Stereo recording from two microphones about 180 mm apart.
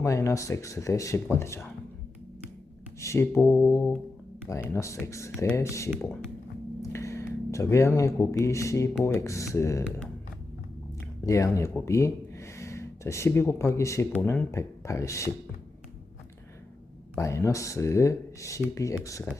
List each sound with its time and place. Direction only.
0.0 s speech: 15° left (ahead or behind)
3.0 s speech: 15° left (ahead or behind)
6.8 s speech: 15° left (ahead or behind)
11.2 s speech: 15° left (ahead or behind)
17.2 s speech: 15° left (ahead or behind)